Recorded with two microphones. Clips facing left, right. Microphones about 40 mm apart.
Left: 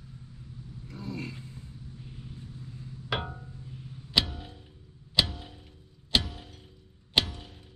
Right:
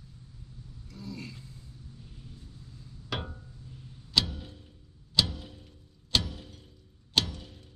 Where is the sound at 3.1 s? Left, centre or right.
Left.